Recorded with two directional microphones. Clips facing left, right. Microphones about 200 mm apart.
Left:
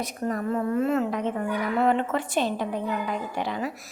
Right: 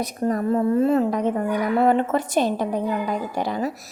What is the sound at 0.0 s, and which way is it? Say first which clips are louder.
Speech: right 5 dB; 35° right (ahead or behind).